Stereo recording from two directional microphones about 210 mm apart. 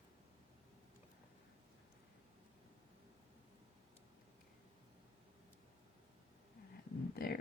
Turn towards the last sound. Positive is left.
turn(degrees=45)  # may be behind; listen again after turning